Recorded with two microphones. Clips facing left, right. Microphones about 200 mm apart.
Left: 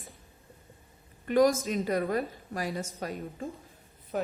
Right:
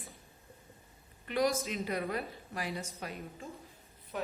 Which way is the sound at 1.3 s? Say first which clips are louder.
Left 7 dB; 45° left (ahead or behind).